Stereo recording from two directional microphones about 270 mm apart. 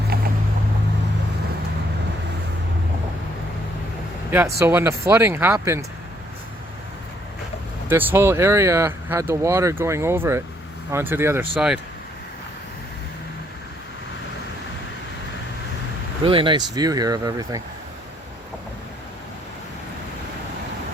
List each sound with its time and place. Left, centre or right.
0.1 s boat: right
4.3 s speech: centre
7.9 s speech: centre
16.2 s speech: centre